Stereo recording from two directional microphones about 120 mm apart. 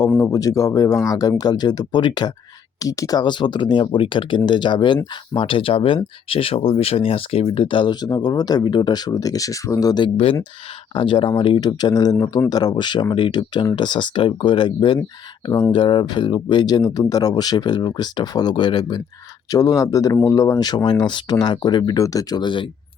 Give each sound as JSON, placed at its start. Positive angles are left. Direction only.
{"t": 0.2, "sound": "speech", "side_deg": 30}